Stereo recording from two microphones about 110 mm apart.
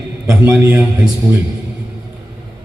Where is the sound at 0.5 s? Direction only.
15° right (ahead or behind).